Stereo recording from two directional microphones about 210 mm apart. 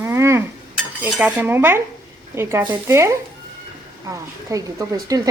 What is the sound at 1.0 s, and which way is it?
Speech, 5° right (ahead or behind).